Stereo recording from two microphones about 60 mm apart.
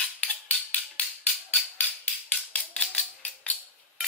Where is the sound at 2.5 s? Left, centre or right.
Left.